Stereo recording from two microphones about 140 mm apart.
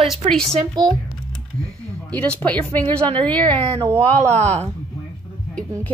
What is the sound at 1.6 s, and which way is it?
Speech, 10° left (ahead or behind).